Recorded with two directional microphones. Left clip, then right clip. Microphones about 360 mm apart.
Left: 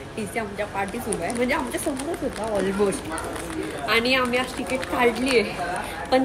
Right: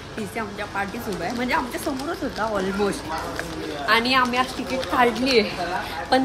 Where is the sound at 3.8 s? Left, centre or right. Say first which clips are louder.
Right 2 dB; centre.